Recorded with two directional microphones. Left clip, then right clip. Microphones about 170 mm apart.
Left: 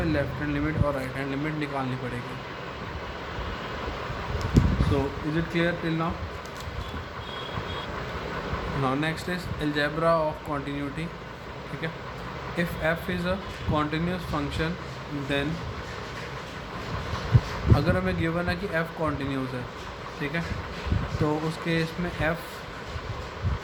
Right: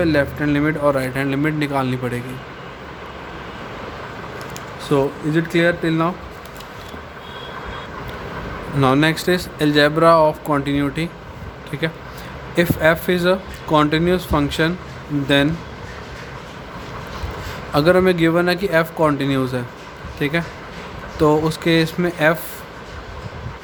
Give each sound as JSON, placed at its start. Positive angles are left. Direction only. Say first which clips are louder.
{"t": 0.0, "sound": "speech", "louder": "right 10 dB", "side_deg": -75}
{"t": 4.9, "sound": "speech", "louder": "right 13 dB", "side_deg": -65}
{"t": 8.8, "sound": "speech", "louder": "right 13 dB", "side_deg": -80}
{"t": 17.7, "sound": "speech", "louder": "right 15 dB", "side_deg": -75}